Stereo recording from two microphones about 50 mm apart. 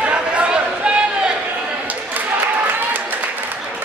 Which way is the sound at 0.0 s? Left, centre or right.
Right.